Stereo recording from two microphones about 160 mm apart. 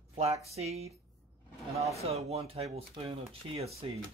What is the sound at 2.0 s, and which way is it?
Speech, 40° right (ahead or behind).